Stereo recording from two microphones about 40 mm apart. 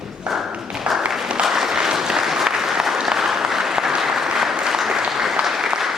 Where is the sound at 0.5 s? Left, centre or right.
Right.